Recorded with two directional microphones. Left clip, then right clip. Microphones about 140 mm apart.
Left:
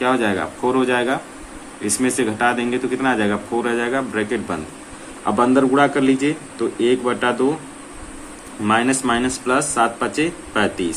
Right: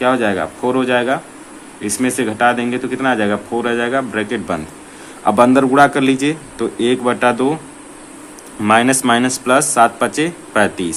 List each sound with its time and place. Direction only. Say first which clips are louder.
0.0 s speech: right 3 dB; 30° right (ahead or behind)
5.2 s speech: right 5 dB; 45° right (ahead or behind)
8.6 s speech: right 5 dB; 50° right (ahead or behind)